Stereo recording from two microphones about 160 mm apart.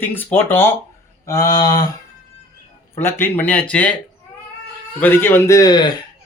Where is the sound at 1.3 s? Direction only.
20° left (ahead or behind).